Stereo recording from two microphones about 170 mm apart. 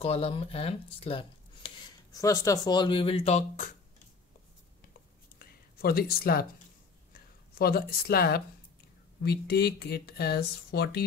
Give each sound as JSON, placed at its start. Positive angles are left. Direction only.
{"t": 0.0, "sound": "speech", "side_deg": 35}
{"t": 2.1, "sound": "speech", "side_deg": 20}
{"t": 5.8, "sound": "speech", "side_deg": 60}
{"t": 7.5, "sound": "speech", "side_deg": 65}